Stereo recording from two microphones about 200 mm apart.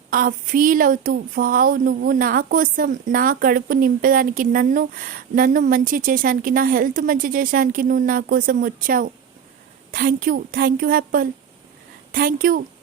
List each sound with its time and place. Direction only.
0.1 s speech: 45° right (ahead or behind)